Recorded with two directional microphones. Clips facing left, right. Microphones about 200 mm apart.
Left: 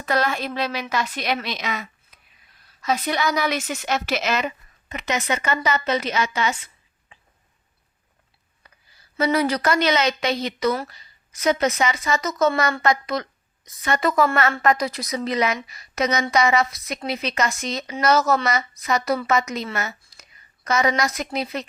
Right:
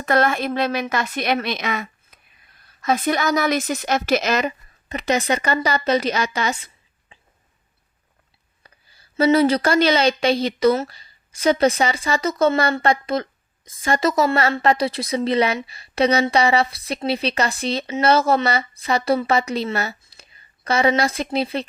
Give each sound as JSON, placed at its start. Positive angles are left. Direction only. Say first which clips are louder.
{"t": 0.0, "sound": "a woman's voice", "louder": "right 4 dB", "side_deg": -50}
{"t": 9.1, "sound": "a woman's voice", "louder": "right 5 dB", "side_deg": -30}
{"t": 14.5, "sound": "a woman's voice", "louder": "right 2 dB", "side_deg": -30}